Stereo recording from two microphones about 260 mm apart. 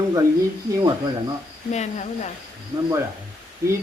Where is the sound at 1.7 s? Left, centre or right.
Left.